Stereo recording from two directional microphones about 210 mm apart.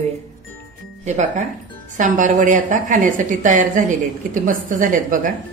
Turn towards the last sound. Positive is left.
turn(degrees=-40)  # may be behind; listen again after turning